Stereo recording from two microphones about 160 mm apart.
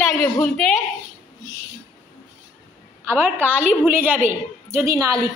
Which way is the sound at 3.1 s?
15° right (ahead or behind).